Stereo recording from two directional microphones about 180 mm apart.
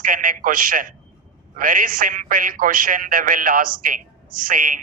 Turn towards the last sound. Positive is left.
turn(degrees=-50)  # may be behind; listen again after turning